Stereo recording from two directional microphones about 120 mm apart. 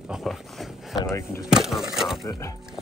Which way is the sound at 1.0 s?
20° left (ahead or behind).